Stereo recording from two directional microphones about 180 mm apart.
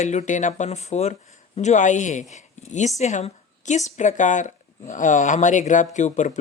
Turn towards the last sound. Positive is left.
turn(degrees=40)  # may be behind; listen again after turning